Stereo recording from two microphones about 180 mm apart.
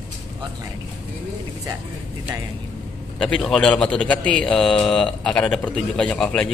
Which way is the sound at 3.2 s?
5° left (ahead or behind).